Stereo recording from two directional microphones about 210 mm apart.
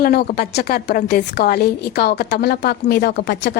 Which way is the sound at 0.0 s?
45° left (ahead or behind).